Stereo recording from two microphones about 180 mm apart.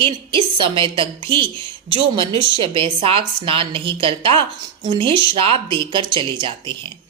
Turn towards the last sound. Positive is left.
turn(degrees=-25)  # may be behind; listen again after turning